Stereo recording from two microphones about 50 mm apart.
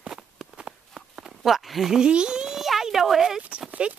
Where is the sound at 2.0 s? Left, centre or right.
Centre.